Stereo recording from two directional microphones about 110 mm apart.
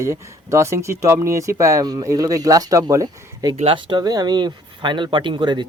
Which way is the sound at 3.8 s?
45° right (ahead or behind).